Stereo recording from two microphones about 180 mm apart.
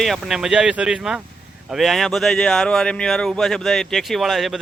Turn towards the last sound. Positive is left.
turn(degrees=0)  # may be behind; listen again after turning